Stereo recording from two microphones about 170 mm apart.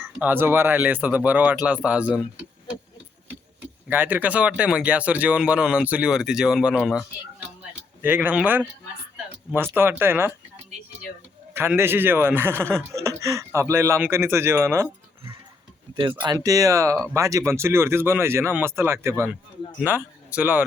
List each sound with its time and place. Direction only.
0.2 s speech: 10° right (ahead or behind)
3.8 s speech: 10° right (ahead or behind)
11.5 s speech: 15° right (ahead or behind)
16.0 s speech: 25° right (ahead or behind); by 20.7 s 10° right (ahead or behind)